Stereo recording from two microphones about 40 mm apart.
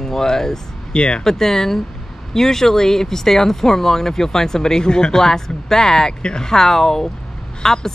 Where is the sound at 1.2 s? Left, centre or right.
Centre.